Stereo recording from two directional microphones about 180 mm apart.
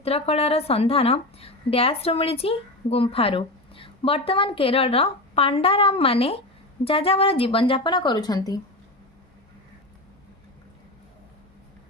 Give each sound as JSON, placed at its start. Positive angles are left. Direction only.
{"t": 0.0, "sound": "a woman's voice", "side_deg": 35}